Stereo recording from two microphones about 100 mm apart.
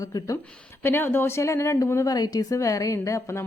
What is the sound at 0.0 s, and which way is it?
Speech, 35° left (ahead or behind).